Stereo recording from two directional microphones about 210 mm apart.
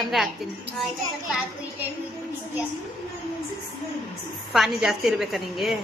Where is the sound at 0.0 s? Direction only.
Centre (ahead or behind).